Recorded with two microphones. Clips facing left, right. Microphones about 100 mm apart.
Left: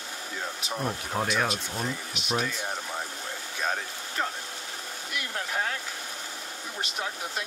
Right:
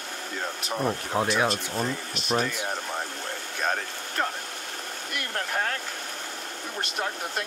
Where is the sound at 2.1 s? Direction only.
5° left (ahead or behind).